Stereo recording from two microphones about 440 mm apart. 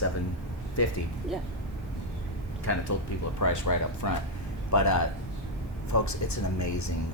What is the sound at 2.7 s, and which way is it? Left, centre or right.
Speech, left.